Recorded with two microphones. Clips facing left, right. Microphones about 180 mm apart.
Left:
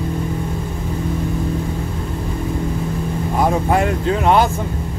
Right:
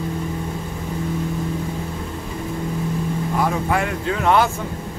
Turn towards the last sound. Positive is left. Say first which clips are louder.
# left 2 dB
turn(degrees=15)  # may be behind; listen again after turning